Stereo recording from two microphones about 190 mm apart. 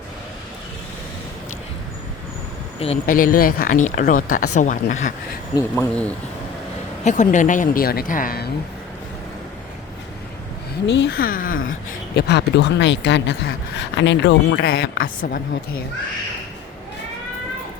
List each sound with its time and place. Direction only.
2.7 s speech: 30° left (ahead or behind)
3.1 s speech: 45° left (ahead or behind)
5.5 s speech: 10° left (ahead or behind)
7.0 s speech: 40° left (ahead or behind)
10.8 s speech: 65° left (ahead or behind)
11.3 s speech: 45° left (ahead or behind)
11.9 s a woman's voice: 65° left (ahead or behind)